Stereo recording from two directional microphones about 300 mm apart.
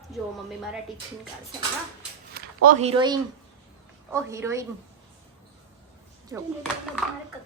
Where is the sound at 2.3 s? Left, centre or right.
Right.